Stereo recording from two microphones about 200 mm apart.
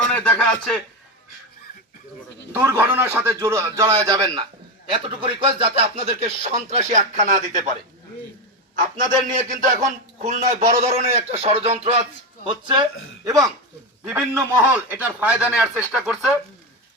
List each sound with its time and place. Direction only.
0.0 s speech: 5° left (ahead or behind)
2.5 s a man's voice: 10° right (ahead or behind); by 7.8 s 40° right (ahead or behind)
9.6 s speech: 40° right (ahead or behind); by 12.8 s 25° right (ahead or behind)
14.0 s a man's voice: 10° right (ahead or behind)